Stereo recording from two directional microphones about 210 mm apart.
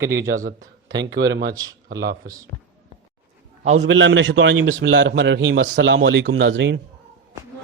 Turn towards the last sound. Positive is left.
turn(degrees=-60)  # may be behind; listen again after turning